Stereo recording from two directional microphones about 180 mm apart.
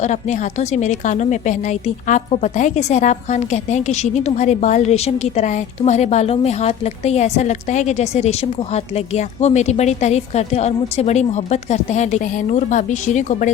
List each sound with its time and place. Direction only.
0.0 s a woman's voice: 40° left (ahead or behind)